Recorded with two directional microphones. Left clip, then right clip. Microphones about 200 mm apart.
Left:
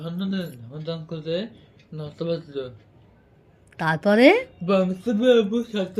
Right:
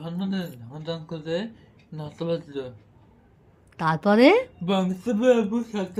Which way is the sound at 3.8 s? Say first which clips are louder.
Left 1 dB; 10° right (ahead or behind).